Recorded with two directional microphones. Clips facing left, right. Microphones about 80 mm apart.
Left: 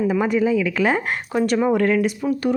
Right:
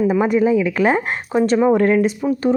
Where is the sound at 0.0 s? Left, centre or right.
Right.